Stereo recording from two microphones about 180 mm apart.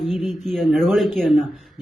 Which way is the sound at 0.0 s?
Centre (ahead or behind).